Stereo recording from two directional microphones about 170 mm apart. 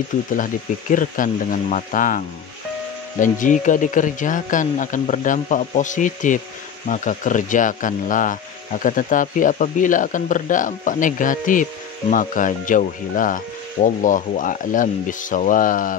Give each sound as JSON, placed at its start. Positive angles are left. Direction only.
{"t": 0.9, "sound": "speech", "side_deg": 50}